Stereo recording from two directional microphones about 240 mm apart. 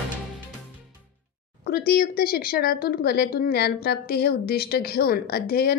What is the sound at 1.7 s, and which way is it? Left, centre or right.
Speech, left.